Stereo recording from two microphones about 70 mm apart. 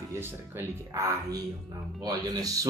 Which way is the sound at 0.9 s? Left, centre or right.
Right.